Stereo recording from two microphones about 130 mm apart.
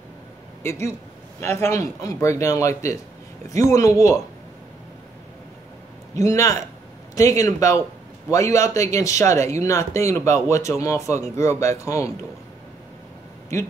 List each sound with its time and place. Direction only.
0.7 s speech: 20° left (ahead or behind)
6.1 s speech: 25° left (ahead or behind)